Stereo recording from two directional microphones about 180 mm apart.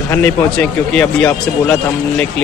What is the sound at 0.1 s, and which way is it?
A man's voice, 10° left (ahead or behind).